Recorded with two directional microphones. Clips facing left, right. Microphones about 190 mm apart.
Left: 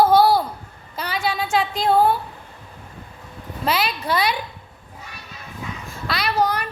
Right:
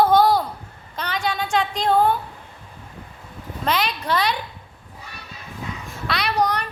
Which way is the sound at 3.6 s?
5° left (ahead or behind).